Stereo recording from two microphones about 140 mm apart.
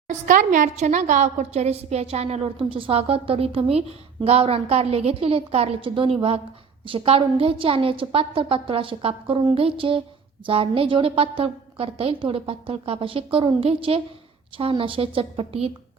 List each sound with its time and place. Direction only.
0.1 s a woman's voice: 70° right (ahead or behind); by 15.7 s 45° right (ahead or behind)